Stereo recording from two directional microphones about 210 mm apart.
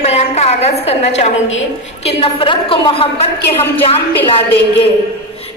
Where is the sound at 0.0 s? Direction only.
30° left (ahead or behind).